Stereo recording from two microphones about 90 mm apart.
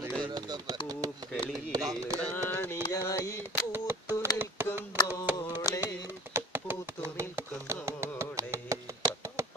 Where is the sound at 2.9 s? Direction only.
35° left (ahead or behind).